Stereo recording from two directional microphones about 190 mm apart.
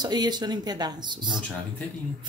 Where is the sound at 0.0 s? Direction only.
20° right (ahead or behind).